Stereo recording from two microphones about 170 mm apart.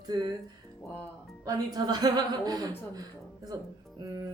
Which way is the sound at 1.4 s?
20° right (ahead or behind).